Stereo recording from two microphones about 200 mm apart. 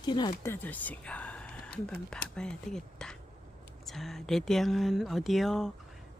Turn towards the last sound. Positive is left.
turn(degrees=0)  # may be behind; listen again after turning